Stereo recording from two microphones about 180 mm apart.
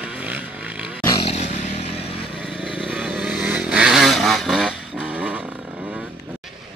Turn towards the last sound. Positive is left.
turn(degrees=-5)  # may be behind; listen again after turning